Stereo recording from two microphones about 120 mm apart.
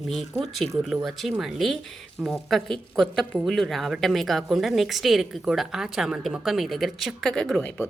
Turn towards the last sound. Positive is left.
turn(degrees=5)  # may be behind; listen again after turning